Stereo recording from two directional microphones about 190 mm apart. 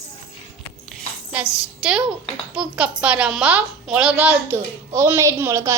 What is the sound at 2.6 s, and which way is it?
Speech, 5° right (ahead or behind).